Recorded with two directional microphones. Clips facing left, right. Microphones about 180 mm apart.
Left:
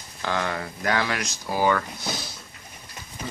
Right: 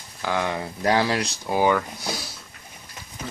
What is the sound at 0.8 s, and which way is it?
Speech, 30° right (ahead or behind).